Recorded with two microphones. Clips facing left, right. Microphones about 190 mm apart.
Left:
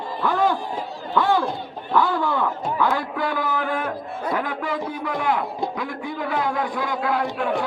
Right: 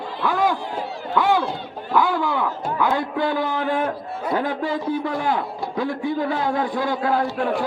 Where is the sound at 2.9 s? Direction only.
25° right (ahead or behind).